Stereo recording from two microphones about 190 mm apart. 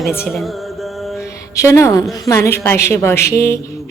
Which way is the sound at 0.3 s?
Centre (ahead or behind).